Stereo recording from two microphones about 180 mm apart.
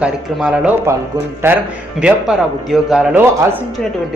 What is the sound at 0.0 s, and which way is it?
Speech, 5° right (ahead or behind).